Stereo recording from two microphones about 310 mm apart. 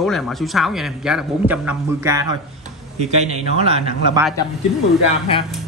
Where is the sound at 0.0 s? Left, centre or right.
Centre.